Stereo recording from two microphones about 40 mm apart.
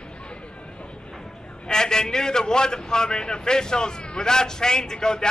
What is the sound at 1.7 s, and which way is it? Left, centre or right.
A man's voice, centre.